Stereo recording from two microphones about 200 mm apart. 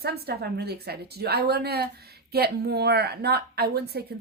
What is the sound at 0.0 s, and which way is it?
Speech, 50° right (ahead or behind).